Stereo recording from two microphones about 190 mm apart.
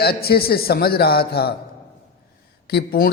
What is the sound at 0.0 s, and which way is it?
A man's voice, 55° left (ahead or behind).